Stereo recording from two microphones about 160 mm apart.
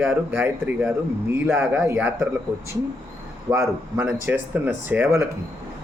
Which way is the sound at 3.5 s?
15° right (ahead or behind).